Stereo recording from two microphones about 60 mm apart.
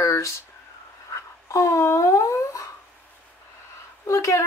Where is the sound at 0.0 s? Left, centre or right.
Left.